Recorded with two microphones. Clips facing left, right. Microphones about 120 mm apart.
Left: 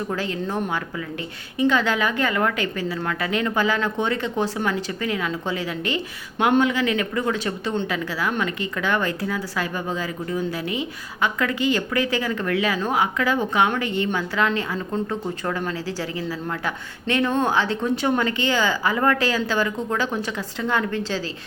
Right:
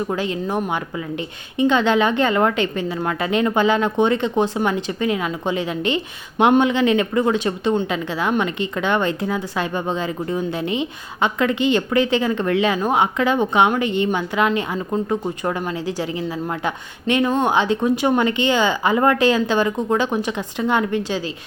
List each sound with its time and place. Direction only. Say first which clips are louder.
0.1 s speech: right 3 dB; 20° right (ahead or behind)